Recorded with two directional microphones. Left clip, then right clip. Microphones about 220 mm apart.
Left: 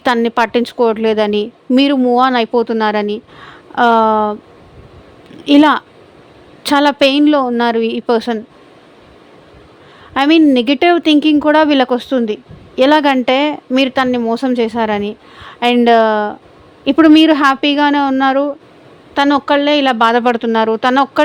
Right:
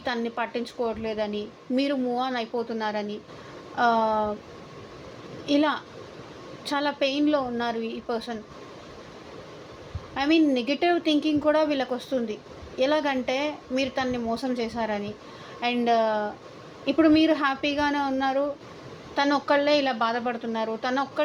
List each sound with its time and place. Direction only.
0.0 s a woman's voice: 55° left (ahead or behind)
5.5 s a woman's voice: 55° left (ahead or behind)
10.2 s a woman's voice: 50° left (ahead or behind)